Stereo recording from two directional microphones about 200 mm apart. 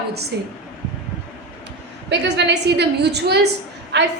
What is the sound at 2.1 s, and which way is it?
A woman's voice, 60° right (ahead or behind).